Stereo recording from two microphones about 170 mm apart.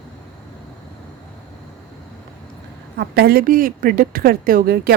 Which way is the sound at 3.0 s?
70° right (ahead or behind).